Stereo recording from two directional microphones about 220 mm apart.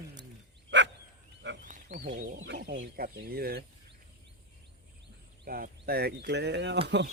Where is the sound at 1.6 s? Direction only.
35° right (ahead or behind).